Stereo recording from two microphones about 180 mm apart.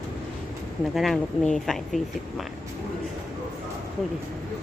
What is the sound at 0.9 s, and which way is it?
Speech, centre (ahead or behind).